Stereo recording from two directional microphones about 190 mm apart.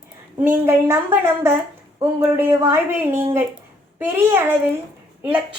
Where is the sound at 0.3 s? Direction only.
10° right (ahead or behind).